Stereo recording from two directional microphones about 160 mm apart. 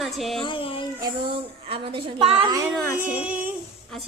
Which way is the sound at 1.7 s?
35° right (ahead or behind).